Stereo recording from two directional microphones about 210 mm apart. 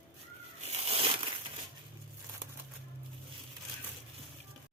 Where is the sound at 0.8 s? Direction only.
30° right (ahead or behind).